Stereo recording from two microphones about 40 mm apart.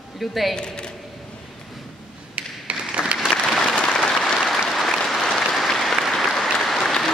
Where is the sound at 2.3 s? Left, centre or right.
Right.